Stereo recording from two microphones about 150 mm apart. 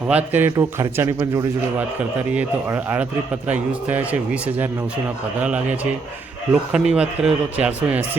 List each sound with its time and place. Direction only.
0.1 s a man's voice: 10° right (ahead or behind)
3.5 s speech: 10° right (ahead or behind)
5.4 s speech: 10° right (ahead or behind)